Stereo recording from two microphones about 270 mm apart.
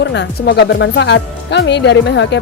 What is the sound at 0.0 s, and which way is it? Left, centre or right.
Speech, left.